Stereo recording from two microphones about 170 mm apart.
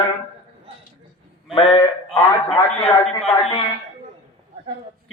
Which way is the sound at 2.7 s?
40° left (ahead or behind).